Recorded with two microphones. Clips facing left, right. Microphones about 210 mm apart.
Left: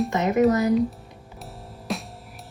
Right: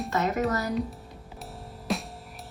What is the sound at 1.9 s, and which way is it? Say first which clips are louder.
Music: even; centre (ahead or behind).